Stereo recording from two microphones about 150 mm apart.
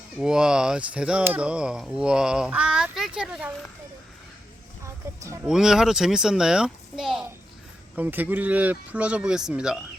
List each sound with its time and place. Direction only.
0.2 s speech: 5° right (ahead or behind)
5.2 s speech: 20° right (ahead or behind)
5.5 s speech: 5° right (ahead or behind)